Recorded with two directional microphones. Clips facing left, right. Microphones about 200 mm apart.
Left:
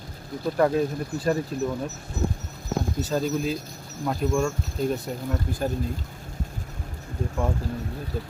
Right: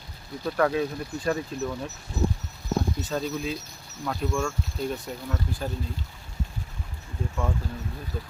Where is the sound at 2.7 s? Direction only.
40° left (ahead or behind).